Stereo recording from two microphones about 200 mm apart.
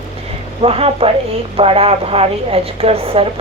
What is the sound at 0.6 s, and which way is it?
Speech, 30° right (ahead or behind).